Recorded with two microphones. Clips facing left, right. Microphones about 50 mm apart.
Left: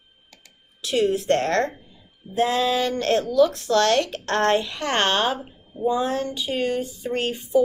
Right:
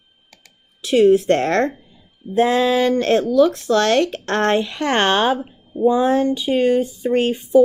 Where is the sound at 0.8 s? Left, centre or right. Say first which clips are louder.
Right 8 dB; right.